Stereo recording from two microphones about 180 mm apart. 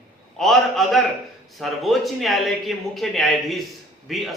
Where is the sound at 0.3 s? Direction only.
Centre (ahead or behind).